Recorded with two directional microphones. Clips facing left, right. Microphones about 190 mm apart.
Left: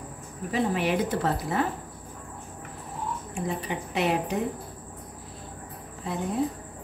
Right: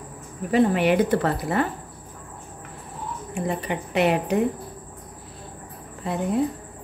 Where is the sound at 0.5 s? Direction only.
65° right (ahead or behind).